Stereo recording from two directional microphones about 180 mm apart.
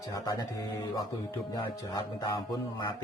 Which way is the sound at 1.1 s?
20° left (ahead or behind).